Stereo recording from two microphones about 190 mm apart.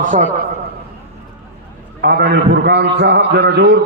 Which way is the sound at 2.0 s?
60° right (ahead or behind).